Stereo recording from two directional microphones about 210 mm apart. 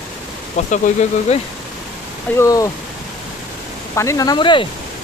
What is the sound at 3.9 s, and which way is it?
Speech, 15° left (ahead or behind).